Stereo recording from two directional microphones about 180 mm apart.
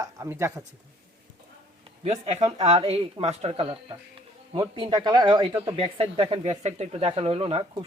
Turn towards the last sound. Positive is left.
turn(degrees=-30)  # may be behind; listen again after turning